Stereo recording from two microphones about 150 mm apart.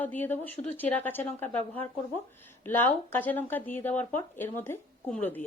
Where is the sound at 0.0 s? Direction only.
10° left (ahead or behind).